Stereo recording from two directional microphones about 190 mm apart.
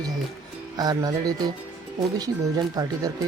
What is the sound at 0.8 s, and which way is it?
Speech, 20° right (ahead or behind).